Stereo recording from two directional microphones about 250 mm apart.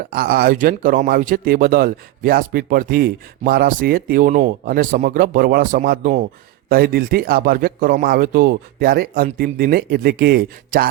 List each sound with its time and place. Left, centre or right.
0.1 s speech: right